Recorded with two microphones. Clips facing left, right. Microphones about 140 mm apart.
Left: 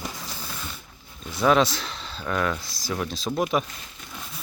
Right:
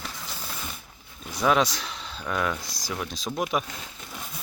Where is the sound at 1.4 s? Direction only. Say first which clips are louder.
Left 3 dB; centre (ahead or behind).